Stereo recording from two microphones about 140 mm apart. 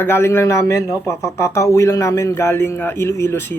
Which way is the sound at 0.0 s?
15° left (ahead or behind).